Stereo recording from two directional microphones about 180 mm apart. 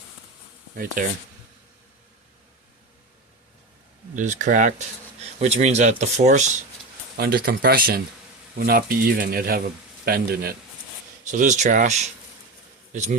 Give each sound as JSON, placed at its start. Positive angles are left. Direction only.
{"t": 1.0, "sound": "speech", "side_deg": -50}
{"t": 4.1, "sound": "speech", "side_deg": -45}
{"t": 7.2, "sound": "speech", "side_deg": -60}
{"t": 11.3, "sound": "speech", "side_deg": -45}